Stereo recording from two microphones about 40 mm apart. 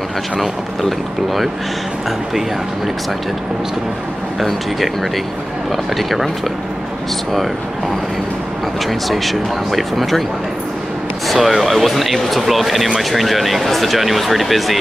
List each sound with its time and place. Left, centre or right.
0.4 s speech: centre
4.4 s speech: centre
9.1 s speech: centre
11.2 s speech: centre